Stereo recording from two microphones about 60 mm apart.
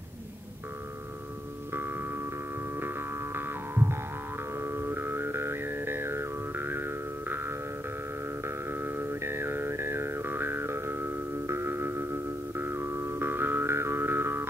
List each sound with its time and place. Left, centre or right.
1.7 s music: right